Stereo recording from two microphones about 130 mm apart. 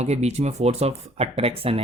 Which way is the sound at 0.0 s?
55° right (ahead or behind).